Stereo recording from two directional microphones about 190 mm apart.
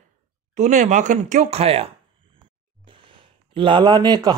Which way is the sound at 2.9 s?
25° right (ahead or behind).